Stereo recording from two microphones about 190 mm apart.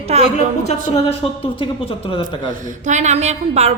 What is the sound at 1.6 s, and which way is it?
Speech, 25° left (ahead or behind).